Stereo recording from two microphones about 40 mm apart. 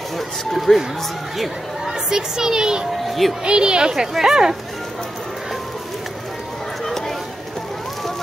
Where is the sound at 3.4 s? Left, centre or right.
Right.